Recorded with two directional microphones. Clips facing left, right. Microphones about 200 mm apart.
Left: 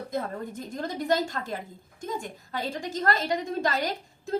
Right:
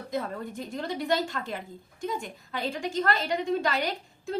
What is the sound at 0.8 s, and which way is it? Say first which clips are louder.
A woman's voice: left 2 dB; 45° left (ahead or behind).